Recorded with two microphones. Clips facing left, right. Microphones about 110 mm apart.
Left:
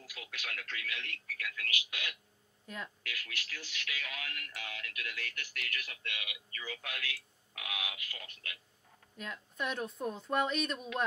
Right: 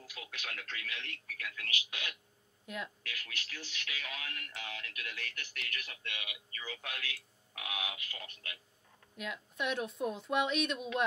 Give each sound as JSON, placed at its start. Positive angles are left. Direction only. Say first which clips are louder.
{"t": 0.0, "sound": "a man's voice", "louder": "even", "side_deg": -30}
{"t": 2.6, "sound": "speech", "louder": "right 2 dB", "side_deg": -10}
{"t": 3.0, "sound": "a man's voice", "louder": "left 1 dB", "side_deg": -30}
{"t": 9.1, "sound": "speech", "louder": "right 2 dB", "side_deg": -10}